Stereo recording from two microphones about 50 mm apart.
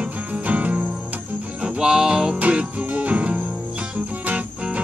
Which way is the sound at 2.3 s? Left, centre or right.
Right.